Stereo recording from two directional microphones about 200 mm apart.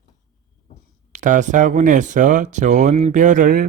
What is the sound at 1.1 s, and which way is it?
Speech, 40° right (ahead or behind).